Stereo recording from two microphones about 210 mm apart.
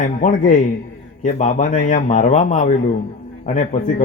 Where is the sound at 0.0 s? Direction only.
35° left (ahead or behind).